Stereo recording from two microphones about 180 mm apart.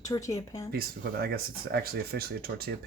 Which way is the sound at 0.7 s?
60° right (ahead or behind).